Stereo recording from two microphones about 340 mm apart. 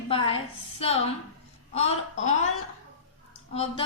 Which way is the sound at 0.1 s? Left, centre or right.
Centre.